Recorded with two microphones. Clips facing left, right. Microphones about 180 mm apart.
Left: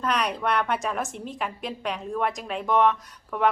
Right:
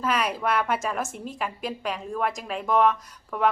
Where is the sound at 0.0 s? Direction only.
5° right (ahead or behind).